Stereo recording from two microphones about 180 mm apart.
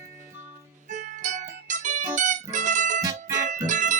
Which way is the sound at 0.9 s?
45° right (ahead or behind).